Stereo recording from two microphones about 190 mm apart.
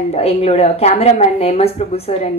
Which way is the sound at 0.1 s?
35° left (ahead or behind).